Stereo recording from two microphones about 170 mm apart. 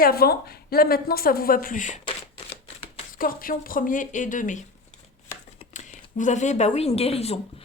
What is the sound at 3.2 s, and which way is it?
Speech, 55° left (ahead or behind).